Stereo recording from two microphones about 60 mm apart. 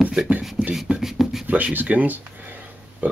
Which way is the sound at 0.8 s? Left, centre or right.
Centre.